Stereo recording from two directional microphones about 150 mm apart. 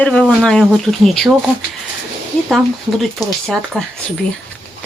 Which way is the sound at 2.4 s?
Centre (ahead or behind).